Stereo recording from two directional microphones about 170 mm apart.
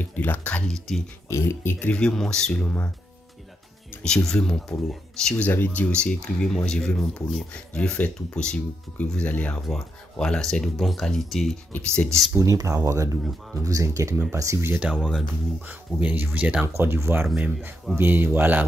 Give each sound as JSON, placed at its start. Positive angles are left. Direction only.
{"t": 0.0, "sound": "speech", "side_deg": 10}
{"t": 3.9, "sound": "music", "side_deg": 5}
{"t": 4.3, "sound": "speech", "side_deg": 5}
{"t": 12.4, "sound": "speech", "side_deg": -20}
{"t": 15.0, "sound": "speech", "side_deg": 5}
{"t": 15.6, "sound": "speech", "side_deg": -10}